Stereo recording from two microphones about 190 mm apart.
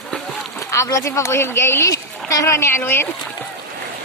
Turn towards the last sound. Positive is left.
turn(degrees=10)  # may be behind; listen again after turning